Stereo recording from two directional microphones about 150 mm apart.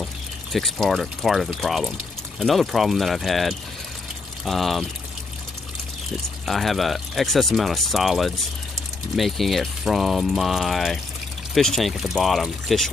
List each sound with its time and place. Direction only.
0.5 s speech: centre (ahead or behind)
6.4 s speech: centre (ahead or behind)